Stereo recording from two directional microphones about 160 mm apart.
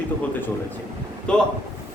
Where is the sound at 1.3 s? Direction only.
5° left (ahead or behind).